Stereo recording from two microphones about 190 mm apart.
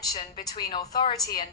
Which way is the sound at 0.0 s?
20° left (ahead or behind).